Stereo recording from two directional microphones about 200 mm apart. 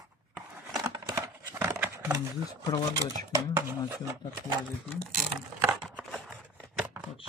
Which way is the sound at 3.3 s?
10° right (ahead or behind).